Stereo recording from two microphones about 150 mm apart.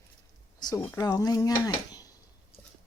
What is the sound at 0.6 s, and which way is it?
Speech, 25° left (ahead or behind).